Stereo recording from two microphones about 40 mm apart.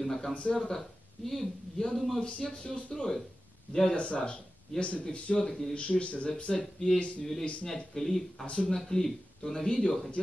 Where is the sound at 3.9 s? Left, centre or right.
Left.